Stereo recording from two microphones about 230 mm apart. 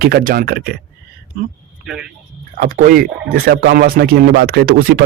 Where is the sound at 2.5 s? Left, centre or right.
Right.